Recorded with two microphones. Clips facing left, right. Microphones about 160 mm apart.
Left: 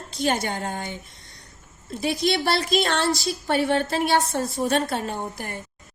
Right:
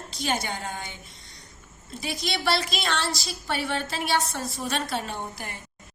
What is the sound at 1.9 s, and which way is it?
A woman's voice, 55° left (ahead or behind).